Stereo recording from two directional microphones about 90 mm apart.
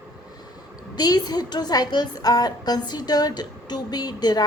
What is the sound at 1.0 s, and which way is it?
A woman's voice, 45° left (ahead or behind).